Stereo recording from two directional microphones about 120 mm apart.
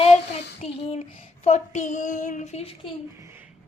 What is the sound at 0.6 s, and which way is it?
Child singing, 60° left (ahead or behind).